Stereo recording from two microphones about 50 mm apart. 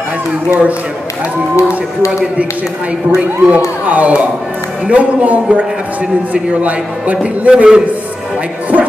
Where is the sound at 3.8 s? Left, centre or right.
Right.